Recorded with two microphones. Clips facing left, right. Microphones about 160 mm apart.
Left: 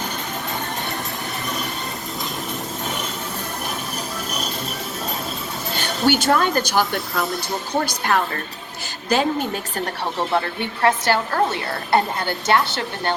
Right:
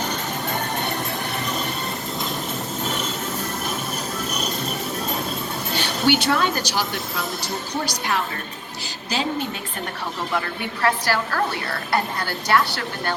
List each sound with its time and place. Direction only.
5.7 s speech: 45° left (ahead or behind)
10.2 s a woman's voice: 30° left (ahead or behind)